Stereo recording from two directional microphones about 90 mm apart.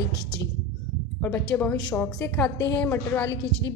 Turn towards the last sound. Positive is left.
turn(degrees=20)  # may be behind; listen again after turning